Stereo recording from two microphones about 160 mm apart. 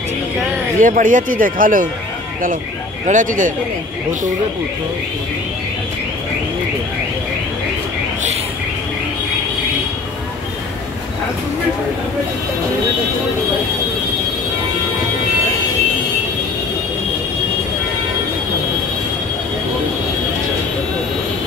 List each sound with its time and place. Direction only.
0.7 s speech: 55° right (ahead or behind)
3.1 s speech: 55° right (ahead or behind)